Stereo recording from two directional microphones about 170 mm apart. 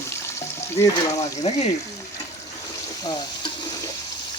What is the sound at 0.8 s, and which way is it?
Speech, 15° left (ahead or behind).